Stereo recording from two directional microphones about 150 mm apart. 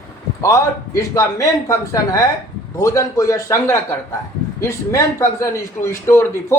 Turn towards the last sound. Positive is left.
turn(degrees=15)  # may be behind; listen again after turning